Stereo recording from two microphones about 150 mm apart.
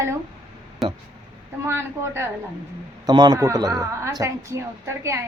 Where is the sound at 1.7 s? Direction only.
15° right (ahead or behind).